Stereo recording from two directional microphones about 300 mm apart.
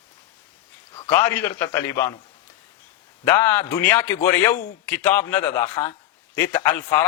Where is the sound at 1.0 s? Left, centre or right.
Centre.